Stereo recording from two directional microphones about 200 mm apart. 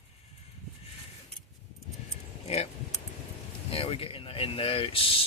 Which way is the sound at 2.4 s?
30° left (ahead or behind).